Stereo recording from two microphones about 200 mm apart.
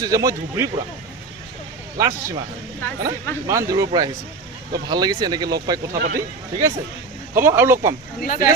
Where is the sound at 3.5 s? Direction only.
15° right (ahead or behind).